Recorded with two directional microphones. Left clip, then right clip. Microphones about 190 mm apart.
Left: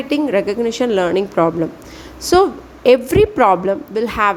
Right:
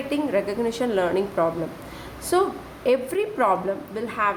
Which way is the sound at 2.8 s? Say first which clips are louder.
Left 11 dB; 35° left (ahead or behind).